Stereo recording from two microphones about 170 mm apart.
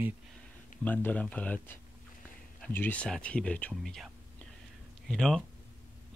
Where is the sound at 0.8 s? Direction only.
10° left (ahead or behind).